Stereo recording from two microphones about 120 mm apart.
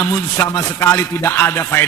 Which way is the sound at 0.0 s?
20° left (ahead or behind).